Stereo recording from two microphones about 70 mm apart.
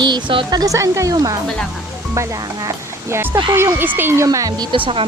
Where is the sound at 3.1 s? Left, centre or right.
Right.